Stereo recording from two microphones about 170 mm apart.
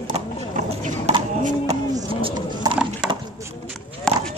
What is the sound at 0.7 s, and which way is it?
Clip-clop, 40° right (ahead or behind).